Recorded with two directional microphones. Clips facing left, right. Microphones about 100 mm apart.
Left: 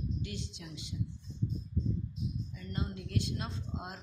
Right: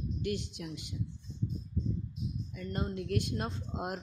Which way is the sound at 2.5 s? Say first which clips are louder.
Right 3 dB; 55° right (ahead or behind).